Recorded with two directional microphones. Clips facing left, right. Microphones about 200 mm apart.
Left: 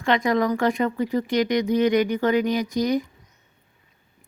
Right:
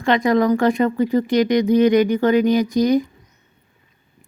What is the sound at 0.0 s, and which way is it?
Speech, 35° right (ahead or behind).